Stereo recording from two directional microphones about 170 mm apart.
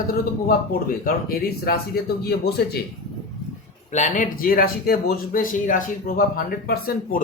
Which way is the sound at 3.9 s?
45° left (ahead or behind).